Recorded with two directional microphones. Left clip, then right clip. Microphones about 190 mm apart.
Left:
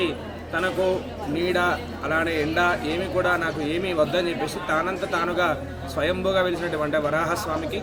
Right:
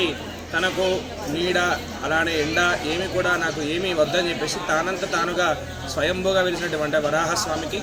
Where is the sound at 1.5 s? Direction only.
25° left (ahead or behind).